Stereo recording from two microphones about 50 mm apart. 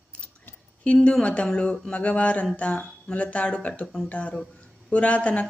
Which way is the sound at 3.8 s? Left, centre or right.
Centre.